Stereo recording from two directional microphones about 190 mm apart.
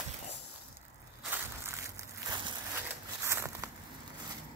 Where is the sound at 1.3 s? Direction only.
15° right (ahead or behind).